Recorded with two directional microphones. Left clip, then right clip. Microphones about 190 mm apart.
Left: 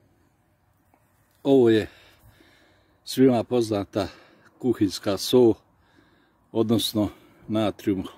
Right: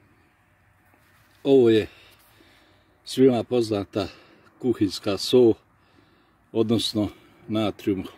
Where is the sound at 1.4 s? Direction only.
Centre (ahead or behind).